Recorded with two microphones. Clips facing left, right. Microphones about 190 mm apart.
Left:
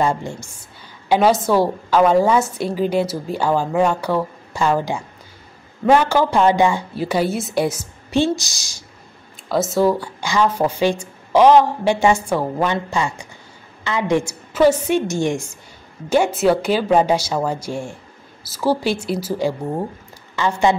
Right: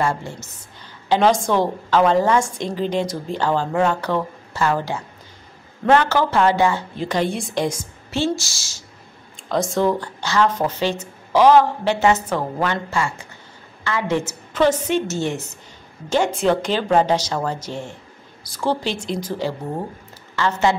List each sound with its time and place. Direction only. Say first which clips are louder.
0.0 s a woman's voice: left 3 dB; 15° left (ahead or behind)
9.5 s a woman's voice: left 2 dB; 5° left (ahead or behind)